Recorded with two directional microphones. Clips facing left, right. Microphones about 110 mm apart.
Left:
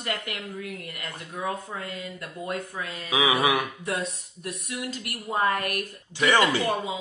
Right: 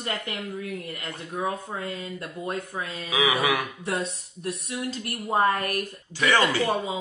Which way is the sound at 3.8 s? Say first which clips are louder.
Right 1 dB; 30° right (ahead or behind).